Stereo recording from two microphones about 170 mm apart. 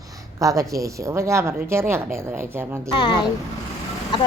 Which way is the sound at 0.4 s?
20° right (ahead or behind).